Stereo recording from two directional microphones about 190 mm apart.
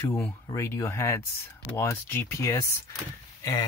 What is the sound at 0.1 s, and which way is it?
Speech, 15° left (ahead or behind).